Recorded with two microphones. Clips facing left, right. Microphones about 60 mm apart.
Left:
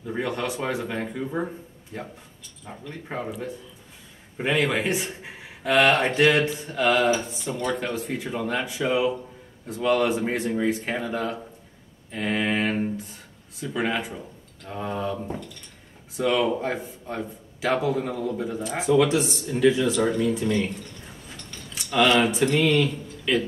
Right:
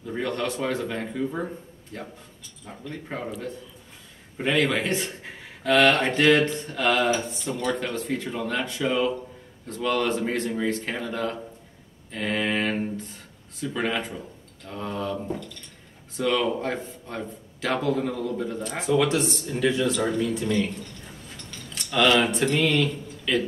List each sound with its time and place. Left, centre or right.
0.0 s speech: centre
16.2 s speech: centre
21.7 s speech: centre